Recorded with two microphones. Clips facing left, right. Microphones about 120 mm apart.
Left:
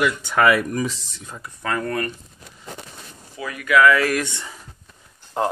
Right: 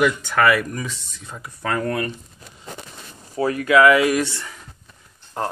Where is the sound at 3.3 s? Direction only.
35° right (ahead or behind); by 4.1 s 20° right (ahead or behind).